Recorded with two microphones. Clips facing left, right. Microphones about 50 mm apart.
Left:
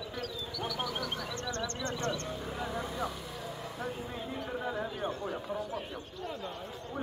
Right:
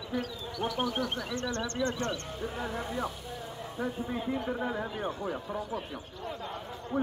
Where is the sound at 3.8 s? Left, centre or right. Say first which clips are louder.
Right 7 dB; centre.